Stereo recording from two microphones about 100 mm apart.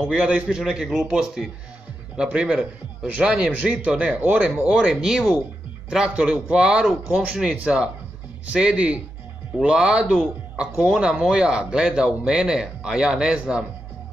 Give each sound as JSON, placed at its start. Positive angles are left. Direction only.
{"t": 0.1, "sound": "speech", "side_deg": -10}
{"t": 10.6, "sound": "speech", "side_deg": -10}